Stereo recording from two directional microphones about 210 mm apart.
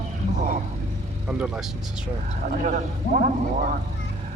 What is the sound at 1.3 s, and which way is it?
Speech, 5° right (ahead or behind).